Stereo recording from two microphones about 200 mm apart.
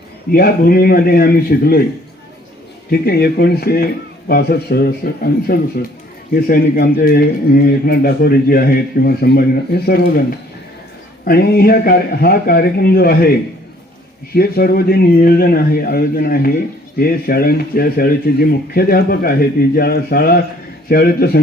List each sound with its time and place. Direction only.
0.3 s speech: 50° left (ahead or behind)
2.9 s speech: 50° left (ahead or behind)
11.3 s speech: 50° left (ahead or behind)
14.3 s speech: 50° left (ahead or behind)